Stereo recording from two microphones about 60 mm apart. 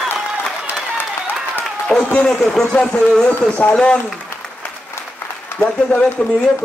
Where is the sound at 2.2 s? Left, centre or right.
Centre.